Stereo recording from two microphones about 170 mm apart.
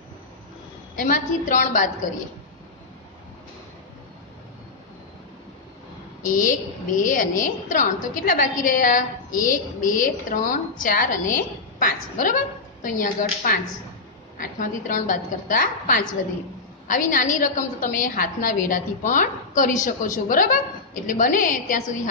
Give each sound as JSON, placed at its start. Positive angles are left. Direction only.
{"t": 0.9, "sound": "a woman's voice", "side_deg": 50}
{"t": 6.2, "sound": "a woman's voice", "side_deg": 50}